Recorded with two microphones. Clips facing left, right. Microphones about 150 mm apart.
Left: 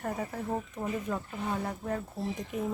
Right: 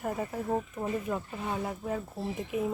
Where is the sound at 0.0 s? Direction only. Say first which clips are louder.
Right 1 dB; 5° right (ahead or behind).